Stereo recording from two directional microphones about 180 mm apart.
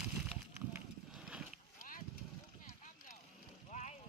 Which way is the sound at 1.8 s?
50° left (ahead or behind).